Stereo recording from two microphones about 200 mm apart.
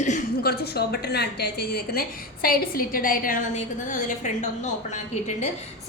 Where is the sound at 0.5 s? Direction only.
55° left (ahead or behind); by 4.7 s 35° left (ahead or behind).